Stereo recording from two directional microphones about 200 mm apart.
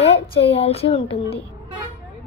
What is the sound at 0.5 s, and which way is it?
Speech, 30° left (ahead or behind).